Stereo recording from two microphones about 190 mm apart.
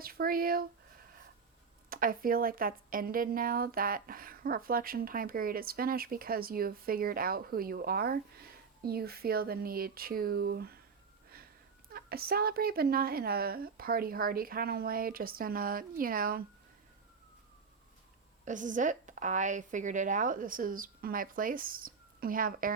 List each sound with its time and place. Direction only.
0.0 s speech: 50° right (ahead or behind)
1.9 s a woman's voice: 50° right (ahead or behind)
11.9 s a woman's voice: 50° right (ahead or behind)
18.4 s a woman's voice: 40° right (ahead or behind)